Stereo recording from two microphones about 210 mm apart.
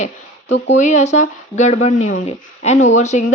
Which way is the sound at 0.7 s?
35° left (ahead or behind).